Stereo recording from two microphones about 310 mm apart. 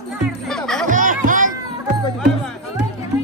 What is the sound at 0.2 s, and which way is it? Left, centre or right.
Music, centre.